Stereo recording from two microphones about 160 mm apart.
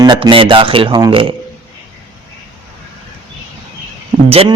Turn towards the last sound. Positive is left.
turn(degrees=-40)  # may be behind; listen again after turning